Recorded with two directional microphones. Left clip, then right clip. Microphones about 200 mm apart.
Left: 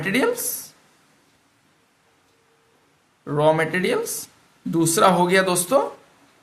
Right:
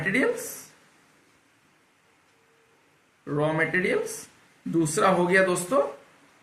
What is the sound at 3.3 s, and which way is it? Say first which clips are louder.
Speech: left 6 dB; 60° left (ahead or behind).